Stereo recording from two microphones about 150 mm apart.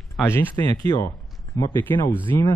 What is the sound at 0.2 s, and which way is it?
Speech, centre (ahead or behind).